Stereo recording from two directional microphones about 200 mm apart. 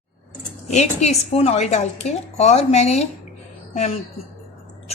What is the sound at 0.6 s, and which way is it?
A woman's voice, 35° left (ahead or behind).